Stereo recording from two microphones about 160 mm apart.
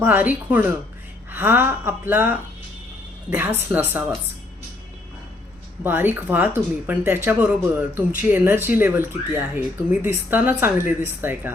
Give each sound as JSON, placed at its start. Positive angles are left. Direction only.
{"t": 0.0, "sound": "speech", "side_deg": -10}
{"t": 5.8, "sound": "speech", "side_deg": -10}